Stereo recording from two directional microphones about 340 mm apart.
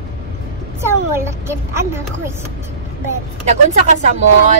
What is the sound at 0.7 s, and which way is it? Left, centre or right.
A woman's voice, centre.